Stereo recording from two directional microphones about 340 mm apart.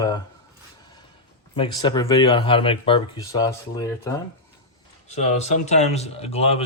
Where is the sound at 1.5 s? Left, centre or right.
Centre.